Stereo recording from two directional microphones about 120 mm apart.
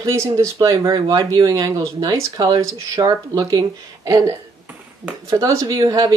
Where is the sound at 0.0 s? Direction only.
25° right (ahead or behind).